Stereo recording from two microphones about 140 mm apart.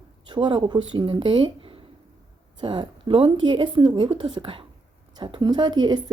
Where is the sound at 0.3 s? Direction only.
35° right (ahead or behind).